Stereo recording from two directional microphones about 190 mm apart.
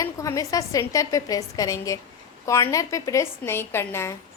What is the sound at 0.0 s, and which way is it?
A woman's voice, 15° left (ahead or behind).